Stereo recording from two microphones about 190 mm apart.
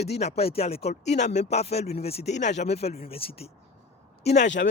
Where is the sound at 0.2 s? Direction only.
35° left (ahead or behind).